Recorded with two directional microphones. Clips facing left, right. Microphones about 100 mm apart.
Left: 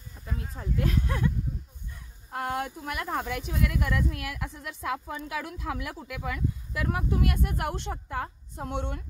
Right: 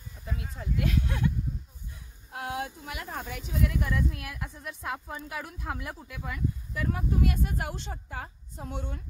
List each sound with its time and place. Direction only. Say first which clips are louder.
0.6 s speech: left 1 dB; 40° left (ahead or behind)
2.3 s speech: left 3 dB; 50° left (ahead or behind); by 9.0 s 70° left (ahead or behind)